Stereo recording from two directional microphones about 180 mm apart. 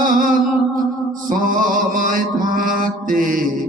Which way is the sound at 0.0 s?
50° right (ahead or behind).